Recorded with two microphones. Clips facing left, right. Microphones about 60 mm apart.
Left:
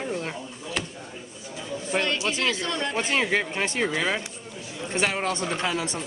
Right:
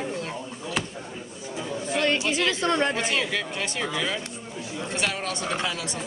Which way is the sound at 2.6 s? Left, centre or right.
Right.